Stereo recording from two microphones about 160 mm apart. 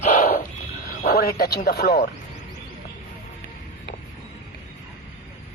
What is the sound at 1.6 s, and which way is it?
Speech, 90° left.